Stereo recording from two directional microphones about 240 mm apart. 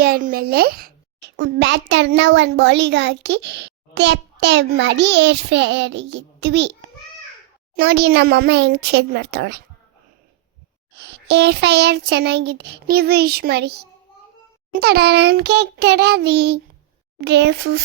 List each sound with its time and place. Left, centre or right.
0.0 s a child's voice: right
7.8 s a child's voice: right
10.9 s a child's voice: right